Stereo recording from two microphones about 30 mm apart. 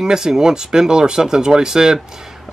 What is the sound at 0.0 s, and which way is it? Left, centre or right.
Speech, centre.